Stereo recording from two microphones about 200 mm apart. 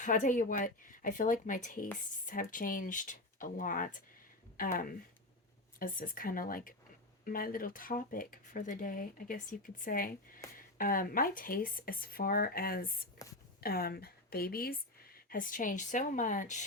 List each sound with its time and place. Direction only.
0.0 s speech: 40° left (ahead or behind)
13.2 s speech: 15° left (ahead or behind)
13.6 s speech: 50° left (ahead or behind)